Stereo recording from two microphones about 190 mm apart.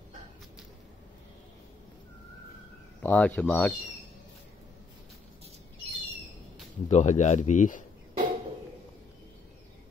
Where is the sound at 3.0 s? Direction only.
10° left (ahead or behind).